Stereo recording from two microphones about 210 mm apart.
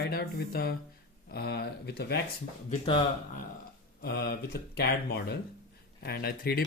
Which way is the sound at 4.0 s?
50° left (ahead or behind).